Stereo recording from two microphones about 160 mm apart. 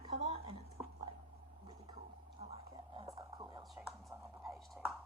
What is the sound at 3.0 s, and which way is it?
Whispering, 20° right (ahead or behind).